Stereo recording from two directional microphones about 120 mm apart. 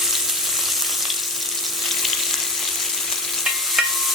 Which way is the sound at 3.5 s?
Centre (ahead or behind).